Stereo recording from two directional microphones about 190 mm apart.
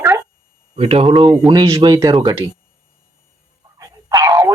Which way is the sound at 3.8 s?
20° right (ahead or behind).